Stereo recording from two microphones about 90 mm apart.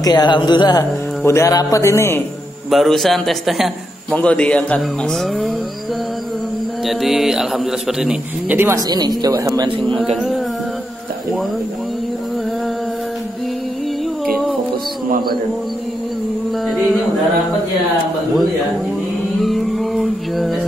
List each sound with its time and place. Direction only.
0.0 s speech: 50° left (ahead or behind)
1.2 s a man's voice: 30° left (ahead or behind)
2.7 s speech: centre (ahead or behind)
4.1 s speech: 15° left (ahead or behind)
6.9 s speech: centre (ahead or behind)
8.5 s speech: 25° right (ahead or behind)
8.7 s speech: 50° right (ahead or behind)
9.9 s speech: centre (ahead or behind)
16.6 s a sound: centre (ahead or behind)
19.4 s a sound: centre (ahead or behind)